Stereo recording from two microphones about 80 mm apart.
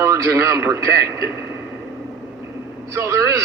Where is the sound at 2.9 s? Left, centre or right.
Right.